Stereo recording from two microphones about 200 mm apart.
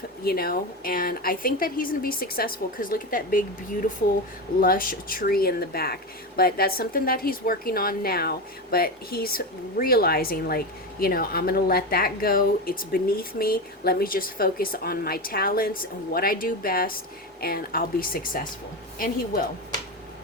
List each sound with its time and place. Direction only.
0.3 s speech: 50° left (ahead or behind)
4.6 s speech: 45° left (ahead or behind)